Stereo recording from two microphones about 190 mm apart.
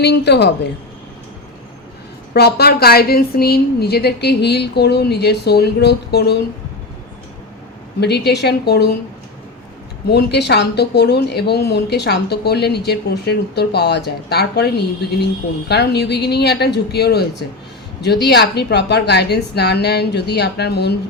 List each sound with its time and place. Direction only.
0.0 s speech: 60° left (ahead or behind)
2.3 s speech: 55° left (ahead or behind)
8.0 s speech: 60° left (ahead or behind)
10.1 s speech: 60° left (ahead or behind)